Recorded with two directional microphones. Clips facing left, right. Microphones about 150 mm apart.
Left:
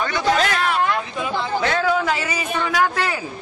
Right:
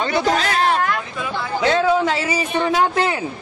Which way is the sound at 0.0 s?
35° right (ahead or behind).